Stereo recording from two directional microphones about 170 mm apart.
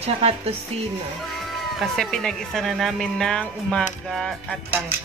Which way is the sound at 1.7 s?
Centre (ahead or behind).